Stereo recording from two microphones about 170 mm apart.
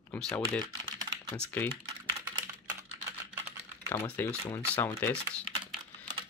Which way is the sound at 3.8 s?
10° left (ahead or behind).